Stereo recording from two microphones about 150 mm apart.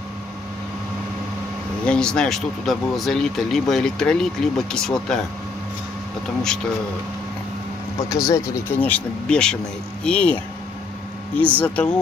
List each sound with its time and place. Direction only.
1.9 s speech: 5° left (ahead or behind)
8.3 s speech: 15° left (ahead or behind)